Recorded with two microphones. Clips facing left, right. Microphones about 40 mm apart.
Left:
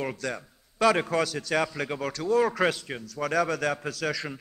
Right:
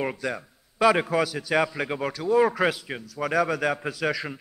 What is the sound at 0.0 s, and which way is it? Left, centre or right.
A man's voice, centre.